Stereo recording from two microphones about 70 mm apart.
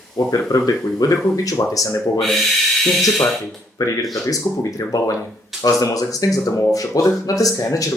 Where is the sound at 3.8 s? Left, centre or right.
Left.